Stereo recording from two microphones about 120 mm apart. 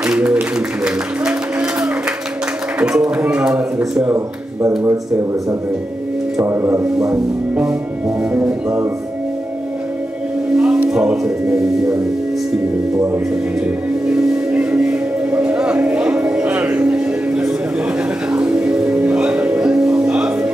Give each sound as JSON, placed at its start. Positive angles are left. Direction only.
{"t": 0.0, "sound": "music", "side_deg": -10}
{"t": 2.8, "sound": "speech", "side_deg": -10}
{"t": 6.4, "sound": "music", "side_deg": -20}
{"t": 7.0, "sound": "speech", "side_deg": -5}
{"t": 10.5, "sound": "speech", "side_deg": -5}
{"t": 13.7, "sound": "music", "side_deg": -5}